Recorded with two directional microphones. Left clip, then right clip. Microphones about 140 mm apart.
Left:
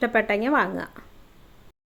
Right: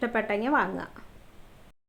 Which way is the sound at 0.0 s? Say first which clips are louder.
Left 5 dB; 35° left (ahead or behind).